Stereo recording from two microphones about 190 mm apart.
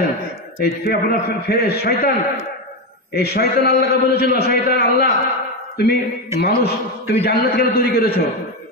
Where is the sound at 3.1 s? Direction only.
55° left (ahead or behind).